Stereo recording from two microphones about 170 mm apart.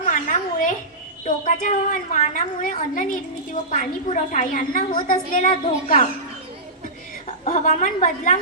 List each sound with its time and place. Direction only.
0.0 s a sound: 50° left (ahead or behind)
1.2 s a woman's voice: 50° left (ahead or behind)
7.4 s a woman's voice: 45° left (ahead or behind)